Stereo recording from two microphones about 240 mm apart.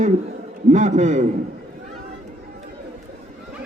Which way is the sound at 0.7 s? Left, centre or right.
Right.